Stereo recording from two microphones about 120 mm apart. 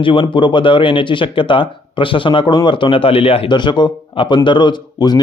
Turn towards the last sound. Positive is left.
turn(degrees=35)  # may be behind; listen again after turning